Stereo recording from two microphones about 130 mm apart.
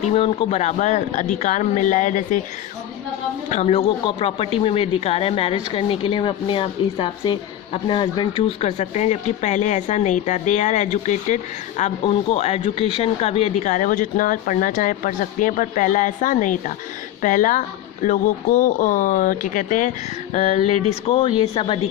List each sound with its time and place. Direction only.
0.1 s speech: 45° left (ahead or behind); by 2.4 s 75° left (ahead or behind)
3.5 s speech: 55° left (ahead or behind)
4.0 s speech: 45° left (ahead or behind)
8.8 s speech: 55° left (ahead or behind)
12.0 s speech: 55° left (ahead or behind)
13.7 s speech: 75° left (ahead or behind)
18.0 s speech: 80° left
20.3 s speech: 55° left (ahead or behind)
21.1 s speech: 45° left (ahead or behind)